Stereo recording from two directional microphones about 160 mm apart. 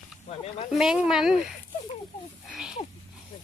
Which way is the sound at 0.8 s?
5° right (ahead or behind).